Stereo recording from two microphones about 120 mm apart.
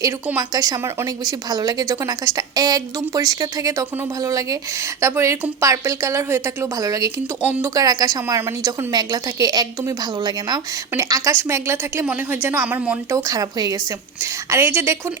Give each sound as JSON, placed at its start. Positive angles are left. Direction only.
{"t": 0.3, "sound": "a woman's voice", "side_deg": -30}
{"t": 8.4, "sound": "a woman's voice", "side_deg": -20}
{"t": 8.9, "sound": "a woman's voice", "side_deg": -35}
{"t": 13.1, "sound": "a woman's voice", "side_deg": -30}